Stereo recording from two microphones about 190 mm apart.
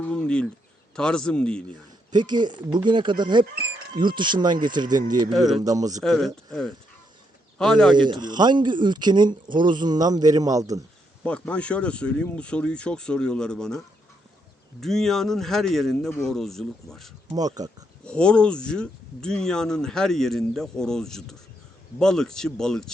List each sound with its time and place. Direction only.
0.1 s speech: 5° left (ahead or behind)
2.1 s speech: 25° right (ahead or behind)
5.3 s speech: centre (ahead or behind)
5.6 s speech: 20° right (ahead or behind)
6.0 s speech: centre (ahead or behind)
7.9 s speech: 25° right (ahead or behind)
11.2 s speech: 5° left (ahead or behind)
17.2 s speech: 20° right (ahead or behind)
18.0 s speech: 5° left (ahead or behind)